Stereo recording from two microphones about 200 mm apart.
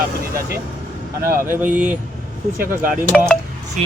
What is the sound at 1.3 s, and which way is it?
Speech, 10° right (ahead or behind).